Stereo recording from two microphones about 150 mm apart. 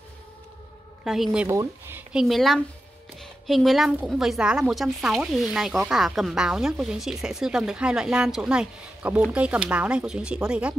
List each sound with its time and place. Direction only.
1.0 s a woman's voice: 5° right (ahead or behind)
1.5 s speech: 15° right (ahead or behind)
2.1 s a woman's voice: centre (ahead or behind)